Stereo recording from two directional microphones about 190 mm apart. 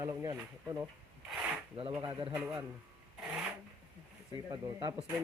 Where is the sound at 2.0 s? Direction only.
25° right (ahead or behind).